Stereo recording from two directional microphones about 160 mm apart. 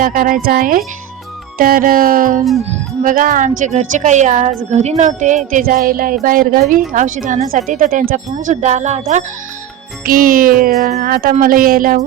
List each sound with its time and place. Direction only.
0.0 s a woman's voice: 60° right (ahead or behind)
10.1 s a woman's voice: 60° right (ahead or behind)